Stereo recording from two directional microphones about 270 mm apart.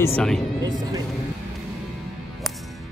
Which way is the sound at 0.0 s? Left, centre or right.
Centre.